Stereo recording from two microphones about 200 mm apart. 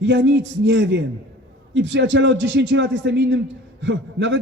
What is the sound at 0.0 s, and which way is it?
A man's voice, 65° right (ahead or behind).